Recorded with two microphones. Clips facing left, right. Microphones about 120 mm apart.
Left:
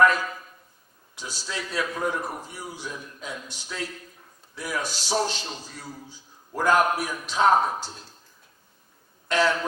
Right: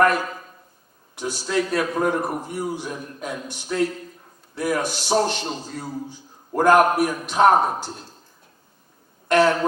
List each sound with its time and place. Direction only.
0.0 s a man's voice: 55° right (ahead or behind)
9.3 s a man's voice: 55° right (ahead or behind)